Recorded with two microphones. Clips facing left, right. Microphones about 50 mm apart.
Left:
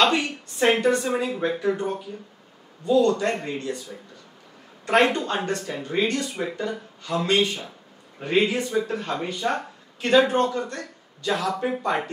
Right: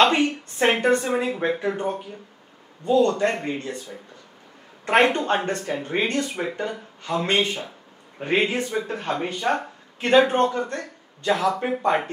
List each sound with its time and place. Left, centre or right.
0.0 s speech: right
4.8 s speech: right